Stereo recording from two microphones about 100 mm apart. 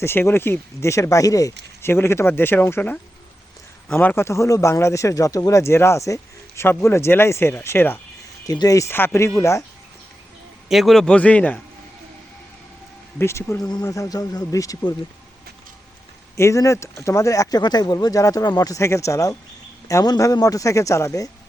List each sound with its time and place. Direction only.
0.0 s speech: 25° left (ahead or behind)
8.4 s speech: 35° left (ahead or behind)
8.9 s speech: 20° left (ahead or behind)
10.7 s a man's voice: centre (ahead or behind); by 11.6 s 15° left (ahead or behind)
13.1 s speech: 25° left (ahead or behind)
16.4 s speech: 30° left (ahead or behind)